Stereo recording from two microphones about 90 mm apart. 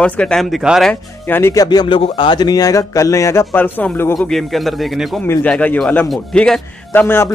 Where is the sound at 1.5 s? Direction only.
45° left (ahead or behind).